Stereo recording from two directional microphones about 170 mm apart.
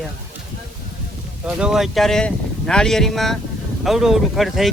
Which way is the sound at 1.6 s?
5° right (ahead or behind).